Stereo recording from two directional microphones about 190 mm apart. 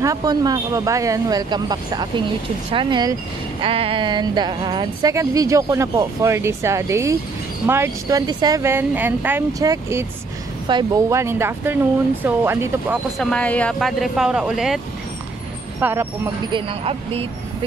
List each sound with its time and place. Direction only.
0.0 s speech: 20° right (ahead or behind)
13.2 s speech: 5° left (ahead or behind)
15.8 s speech: 10° right (ahead or behind)
16.5 s speech: 30° right (ahead or behind)